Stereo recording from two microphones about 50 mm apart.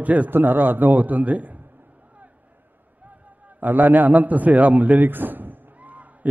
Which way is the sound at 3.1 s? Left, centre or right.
Right.